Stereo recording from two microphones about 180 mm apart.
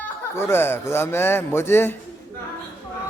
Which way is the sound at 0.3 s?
15° left (ahead or behind).